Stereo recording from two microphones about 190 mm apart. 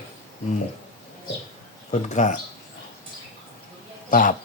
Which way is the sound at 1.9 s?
40° left (ahead or behind).